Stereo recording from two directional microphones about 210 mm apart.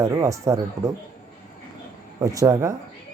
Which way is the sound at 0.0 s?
15° right (ahead or behind).